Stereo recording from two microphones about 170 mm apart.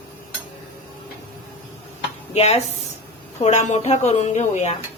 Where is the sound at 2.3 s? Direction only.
40° left (ahead or behind).